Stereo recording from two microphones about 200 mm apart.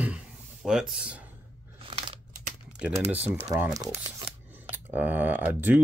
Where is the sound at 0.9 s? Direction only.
5° right (ahead or behind).